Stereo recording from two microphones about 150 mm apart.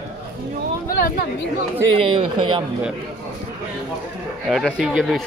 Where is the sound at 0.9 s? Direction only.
85° left.